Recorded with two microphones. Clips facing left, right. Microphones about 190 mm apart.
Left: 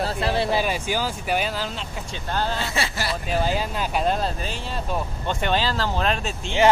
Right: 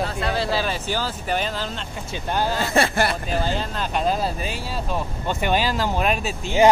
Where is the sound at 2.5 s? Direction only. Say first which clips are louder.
Right 7 dB; 50° right (ahead or behind).